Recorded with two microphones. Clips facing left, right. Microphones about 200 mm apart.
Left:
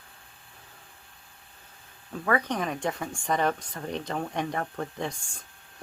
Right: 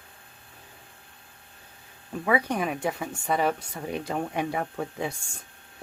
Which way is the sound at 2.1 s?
10° right (ahead or behind).